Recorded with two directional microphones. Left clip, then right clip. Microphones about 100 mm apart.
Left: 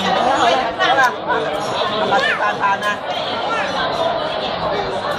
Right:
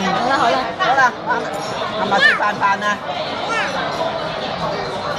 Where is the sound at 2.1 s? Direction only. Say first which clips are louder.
Right 5 dB; 30° right (ahead or behind).